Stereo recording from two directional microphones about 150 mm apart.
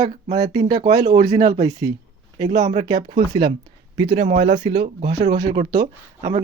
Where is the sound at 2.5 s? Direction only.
50° right (ahead or behind).